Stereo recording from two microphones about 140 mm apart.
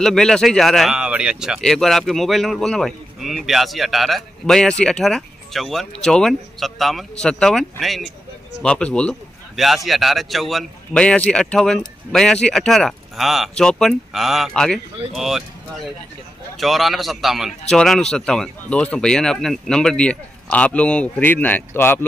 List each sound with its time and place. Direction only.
0.0 s speech: 5° left (ahead or behind)
16.5 s speech: centre (ahead or behind)